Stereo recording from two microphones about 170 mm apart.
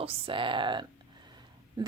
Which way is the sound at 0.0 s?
35° right (ahead or behind).